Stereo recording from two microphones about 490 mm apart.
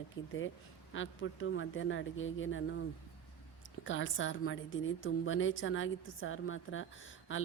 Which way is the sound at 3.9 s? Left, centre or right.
Left.